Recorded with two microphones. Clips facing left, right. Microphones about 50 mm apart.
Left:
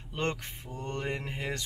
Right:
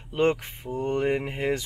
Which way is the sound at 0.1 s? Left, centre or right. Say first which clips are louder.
Right 10 dB; centre.